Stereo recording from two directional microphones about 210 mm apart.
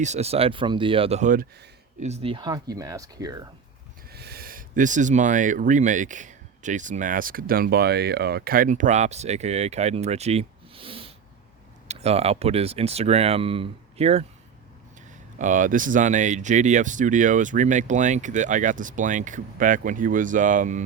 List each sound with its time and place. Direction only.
0.0 s speech: 30° right (ahead or behind)
4.1 s speech: 50° right (ahead or behind); by 14.3 s 30° right (ahead or behind)
15.4 s speech: 35° right (ahead or behind)